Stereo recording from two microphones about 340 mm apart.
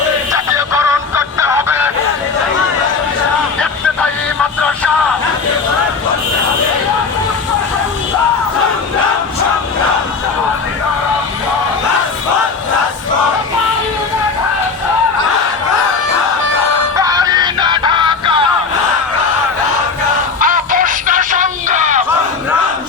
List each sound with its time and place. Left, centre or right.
0.3 s music: centre
17.0 s music: centre
20.4 s music: right